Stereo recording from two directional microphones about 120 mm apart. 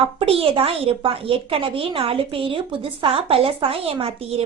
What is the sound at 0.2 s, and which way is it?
Speech, 50° right (ahead or behind).